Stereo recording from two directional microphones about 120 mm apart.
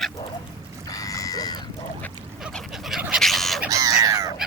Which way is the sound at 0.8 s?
30° left (ahead or behind).